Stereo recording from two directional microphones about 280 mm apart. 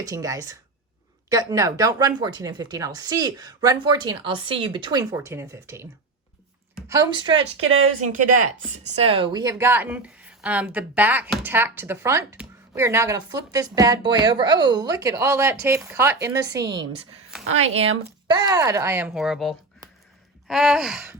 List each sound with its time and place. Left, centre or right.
0.0 s speech: centre
18.3 s speech: centre